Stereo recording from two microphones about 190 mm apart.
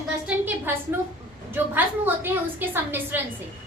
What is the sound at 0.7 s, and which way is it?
Speech, 10° right (ahead or behind).